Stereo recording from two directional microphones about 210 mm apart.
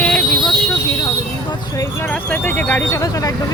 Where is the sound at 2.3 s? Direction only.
10° left (ahead or behind).